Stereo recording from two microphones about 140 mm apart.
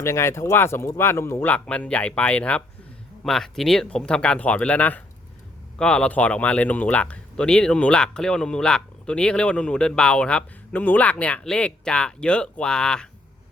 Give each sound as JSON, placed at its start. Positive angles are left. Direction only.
{"t": 0.0, "sound": "speech", "side_deg": 20}